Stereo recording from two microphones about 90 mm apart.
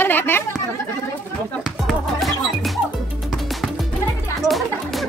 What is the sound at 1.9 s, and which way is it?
Music, centre (ahead or behind).